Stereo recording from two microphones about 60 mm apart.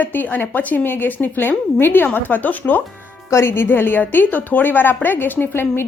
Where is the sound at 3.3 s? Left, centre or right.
Left.